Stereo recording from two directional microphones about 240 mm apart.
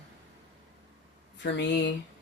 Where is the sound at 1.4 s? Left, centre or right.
Left.